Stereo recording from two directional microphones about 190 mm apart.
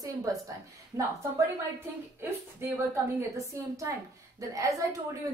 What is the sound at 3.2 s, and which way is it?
A woman's voice, 15° right (ahead or behind).